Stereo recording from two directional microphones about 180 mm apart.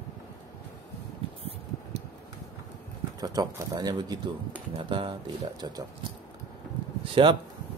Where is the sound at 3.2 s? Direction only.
20° right (ahead or behind).